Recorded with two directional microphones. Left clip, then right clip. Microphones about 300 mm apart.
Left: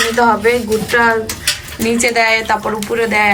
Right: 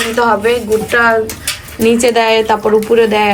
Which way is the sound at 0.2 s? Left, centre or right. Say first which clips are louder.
Right 2 dB; centre.